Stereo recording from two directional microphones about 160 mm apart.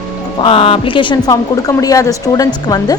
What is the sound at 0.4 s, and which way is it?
A woman's voice, 35° left (ahead or behind).